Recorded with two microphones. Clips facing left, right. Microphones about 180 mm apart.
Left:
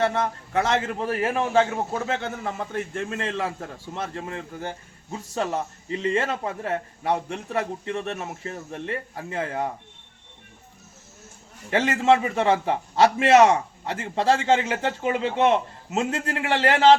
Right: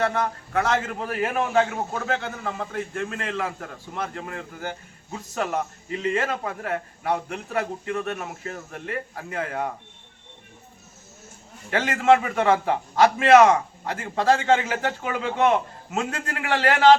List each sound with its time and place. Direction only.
0.0 s a man's voice: 25° left (ahead or behind)
2.9 s a man's voice: 25° left (ahead or behind)
11.7 s a man's voice: 25° left (ahead or behind)